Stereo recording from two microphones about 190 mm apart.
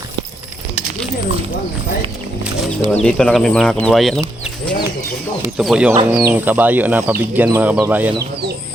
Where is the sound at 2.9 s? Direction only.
5° left (ahead or behind).